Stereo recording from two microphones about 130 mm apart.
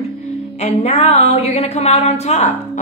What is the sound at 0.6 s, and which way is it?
A woman's voice, 55° left (ahead or behind).